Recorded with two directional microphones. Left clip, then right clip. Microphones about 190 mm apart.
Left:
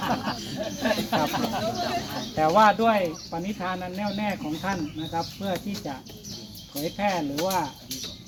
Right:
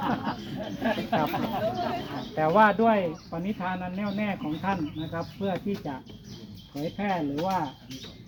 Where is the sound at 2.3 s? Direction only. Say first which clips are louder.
Left 2 dB; 40° right (ahead or behind).